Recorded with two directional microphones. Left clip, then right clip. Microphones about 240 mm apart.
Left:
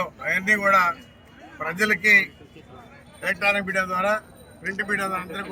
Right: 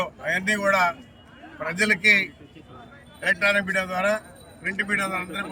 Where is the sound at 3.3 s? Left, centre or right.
Centre.